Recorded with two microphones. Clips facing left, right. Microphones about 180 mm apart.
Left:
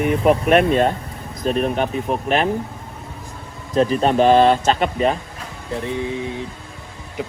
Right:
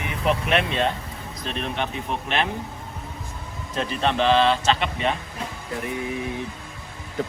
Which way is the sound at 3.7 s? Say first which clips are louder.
Left 8 dB; 40° left (ahead or behind).